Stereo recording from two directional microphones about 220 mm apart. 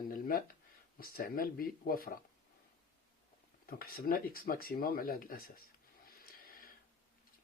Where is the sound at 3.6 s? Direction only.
40° left (ahead or behind).